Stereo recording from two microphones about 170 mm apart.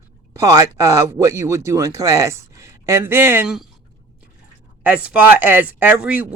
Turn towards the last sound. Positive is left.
turn(degrees=-10)  # may be behind; listen again after turning